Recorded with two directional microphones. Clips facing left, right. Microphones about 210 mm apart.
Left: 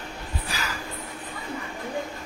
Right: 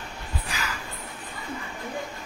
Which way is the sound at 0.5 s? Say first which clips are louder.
Left 1 dB; 35° left (ahead or behind).